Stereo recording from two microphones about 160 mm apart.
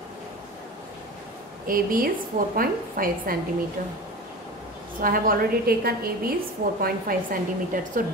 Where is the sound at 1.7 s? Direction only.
60° right (ahead or behind).